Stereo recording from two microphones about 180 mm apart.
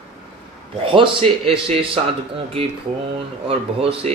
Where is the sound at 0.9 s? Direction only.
30° right (ahead or behind).